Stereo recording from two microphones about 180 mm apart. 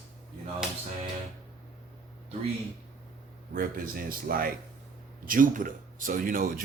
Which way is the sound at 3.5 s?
50° right (ahead or behind).